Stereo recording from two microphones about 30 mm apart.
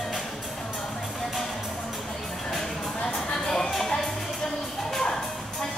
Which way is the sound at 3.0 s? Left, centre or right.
Left.